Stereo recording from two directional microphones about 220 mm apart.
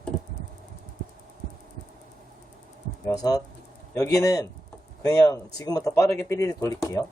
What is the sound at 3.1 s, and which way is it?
Speech, 15° left (ahead or behind).